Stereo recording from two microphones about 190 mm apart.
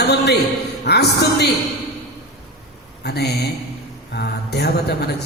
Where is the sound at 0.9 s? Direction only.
60° left (ahead or behind).